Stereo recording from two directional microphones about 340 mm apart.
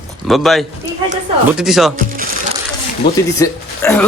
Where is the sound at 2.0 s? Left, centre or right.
Right.